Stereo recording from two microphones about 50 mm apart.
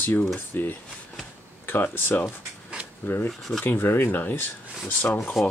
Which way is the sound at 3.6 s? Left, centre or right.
Left.